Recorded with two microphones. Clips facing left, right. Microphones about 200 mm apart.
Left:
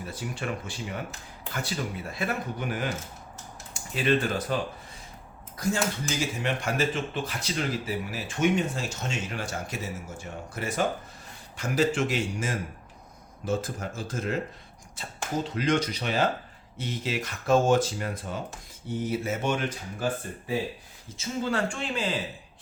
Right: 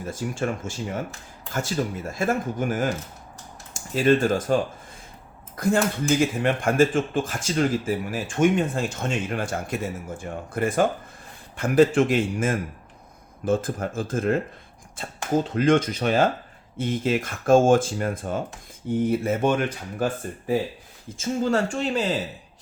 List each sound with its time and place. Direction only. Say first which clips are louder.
0.0 s speech: right 7 dB; 45° right (ahead or behind)
21.2 s speech: right 5 dB; 45° right (ahead or behind)